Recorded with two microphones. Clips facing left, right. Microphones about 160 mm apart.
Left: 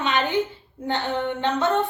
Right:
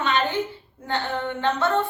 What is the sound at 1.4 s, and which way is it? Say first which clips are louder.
Speech: even; 20° left (ahead or behind).